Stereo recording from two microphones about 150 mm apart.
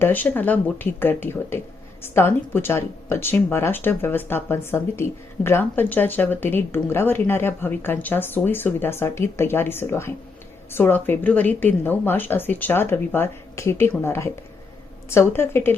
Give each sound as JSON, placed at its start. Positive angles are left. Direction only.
{"t": 0.0, "sound": "speech", "side_deg": 10}